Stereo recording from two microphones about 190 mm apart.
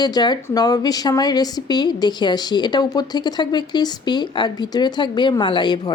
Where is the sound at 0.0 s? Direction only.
20° left (ahead or behind).